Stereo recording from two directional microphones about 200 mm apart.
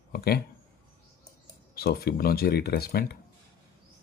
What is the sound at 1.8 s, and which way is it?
Speech, 50° left (ahead or behind).